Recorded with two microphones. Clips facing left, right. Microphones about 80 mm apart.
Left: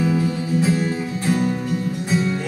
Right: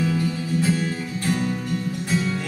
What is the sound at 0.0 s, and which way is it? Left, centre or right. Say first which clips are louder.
Music: left 3 dB; centre.